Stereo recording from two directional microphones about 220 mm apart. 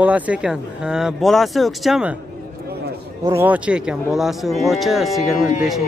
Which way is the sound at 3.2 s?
10° right (ahead or behind).